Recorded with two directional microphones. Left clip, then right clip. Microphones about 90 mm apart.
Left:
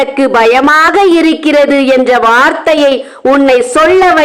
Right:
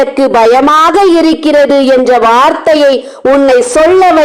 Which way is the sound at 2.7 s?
35° right (ahead or behind).